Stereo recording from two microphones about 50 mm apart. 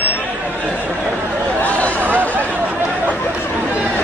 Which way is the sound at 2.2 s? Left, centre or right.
Left.